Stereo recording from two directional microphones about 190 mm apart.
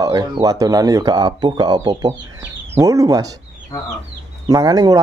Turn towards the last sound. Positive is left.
turn(degrees=-20)  # may be behind; listen again after turning